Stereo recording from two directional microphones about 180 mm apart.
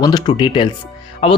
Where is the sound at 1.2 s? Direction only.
35° left (ahead or behind).